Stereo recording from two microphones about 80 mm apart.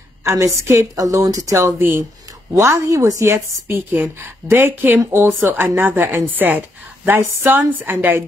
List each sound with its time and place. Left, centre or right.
0.2 s a woman's voice: right
1.8 s speech: right
2.5 s a woman's voice: right